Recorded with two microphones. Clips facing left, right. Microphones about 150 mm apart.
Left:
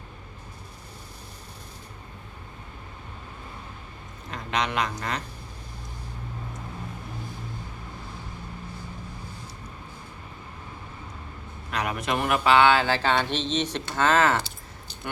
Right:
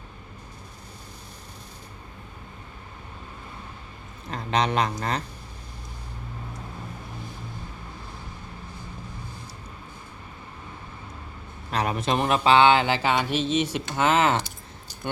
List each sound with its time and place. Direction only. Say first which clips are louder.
4.3 s a man's voice: right 4 dB; 35° right (ahead or behind)
11.7 s speech: right 3 dB; 30° right (ahead or behind)